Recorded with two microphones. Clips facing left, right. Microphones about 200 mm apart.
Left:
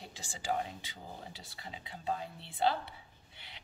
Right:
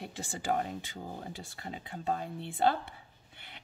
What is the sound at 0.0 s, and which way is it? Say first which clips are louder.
A woman's voice: right 5 dB; 55° right (ahead or behind).